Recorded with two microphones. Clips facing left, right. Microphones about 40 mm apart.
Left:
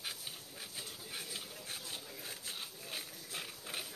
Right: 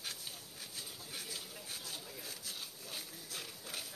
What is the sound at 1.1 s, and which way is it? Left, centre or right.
Pig, centre.